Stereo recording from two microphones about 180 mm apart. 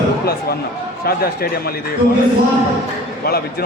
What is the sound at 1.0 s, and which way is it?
Speech, 55° left (ahead or behind).